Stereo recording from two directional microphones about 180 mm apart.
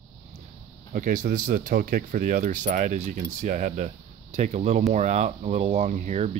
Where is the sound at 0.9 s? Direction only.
45° right (ahead or behind).